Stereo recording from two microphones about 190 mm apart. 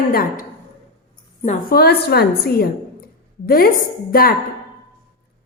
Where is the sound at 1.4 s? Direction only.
40° left (ahead or behind).